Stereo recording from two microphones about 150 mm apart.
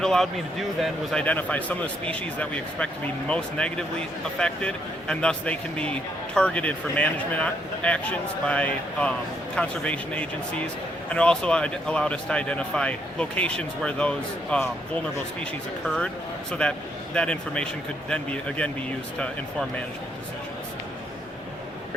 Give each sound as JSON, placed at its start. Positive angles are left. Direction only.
{"t": 0.0, "sound": "a man's voice", "side_deg": 5}
{"t": 16.5, "sound": "a man's voice", "side_deg": 5}